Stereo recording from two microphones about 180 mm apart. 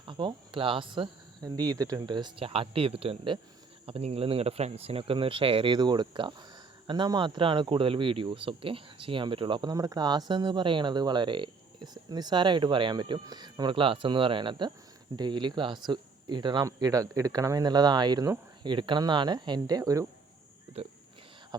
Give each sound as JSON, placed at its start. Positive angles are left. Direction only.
{"t": 0.0, "sound": "speech", "side_deg": -25}
{"t": 20.8, "sound": "speech", "side_deg": -35}
{"t": 21.5, "sound": "beatboxing", "side_deg": -25}